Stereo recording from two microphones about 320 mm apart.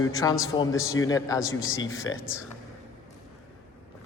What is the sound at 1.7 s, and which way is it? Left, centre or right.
Speech, left.